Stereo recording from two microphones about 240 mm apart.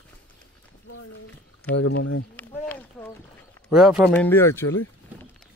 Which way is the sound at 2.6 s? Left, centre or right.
Centre.